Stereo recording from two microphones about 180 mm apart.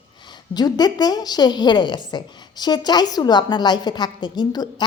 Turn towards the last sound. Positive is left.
turn(degrees=25)  # may be behind; listen again after turning